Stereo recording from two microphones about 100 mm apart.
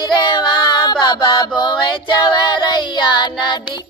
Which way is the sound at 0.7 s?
45° left (ahead or behind).